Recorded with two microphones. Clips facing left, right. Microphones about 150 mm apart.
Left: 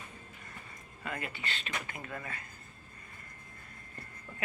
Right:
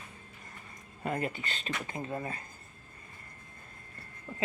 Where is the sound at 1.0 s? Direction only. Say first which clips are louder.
Right 6 dB; 40° right (ahead or behind).